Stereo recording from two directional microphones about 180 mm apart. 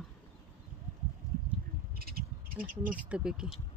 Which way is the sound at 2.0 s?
55° right (ahead or behind).